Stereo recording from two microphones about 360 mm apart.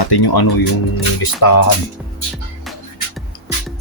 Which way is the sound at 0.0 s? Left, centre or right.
Left.